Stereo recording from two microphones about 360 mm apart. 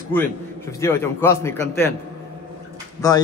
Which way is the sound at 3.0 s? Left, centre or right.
Centre.